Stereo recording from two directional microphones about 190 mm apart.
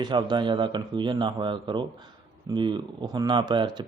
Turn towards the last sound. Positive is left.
turn(degrees=-25)  # may be behind; listen again after turning